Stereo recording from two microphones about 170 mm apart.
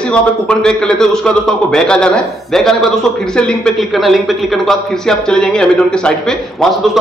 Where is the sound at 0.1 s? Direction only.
5° left (ahead or behind).